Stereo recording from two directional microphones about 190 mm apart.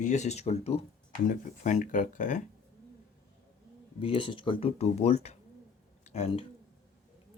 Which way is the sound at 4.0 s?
30° left (ahead or behind).